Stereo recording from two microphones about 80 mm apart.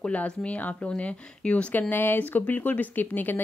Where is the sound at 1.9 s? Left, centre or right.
Left.